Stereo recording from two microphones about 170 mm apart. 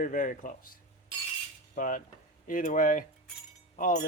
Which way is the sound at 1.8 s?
50° left (ahead or behind).